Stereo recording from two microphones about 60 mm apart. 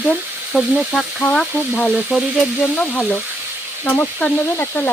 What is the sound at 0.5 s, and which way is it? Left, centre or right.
Sizzle, centre.